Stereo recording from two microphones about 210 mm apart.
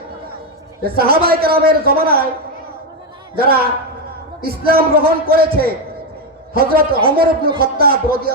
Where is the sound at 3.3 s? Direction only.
45° right (ahead or behind).